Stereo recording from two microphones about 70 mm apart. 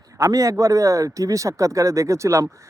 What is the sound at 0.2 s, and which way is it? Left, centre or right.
Speech, right.